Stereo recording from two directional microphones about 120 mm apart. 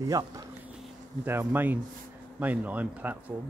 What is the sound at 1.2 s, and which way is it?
A man's voice, 15° right (ahead or behind).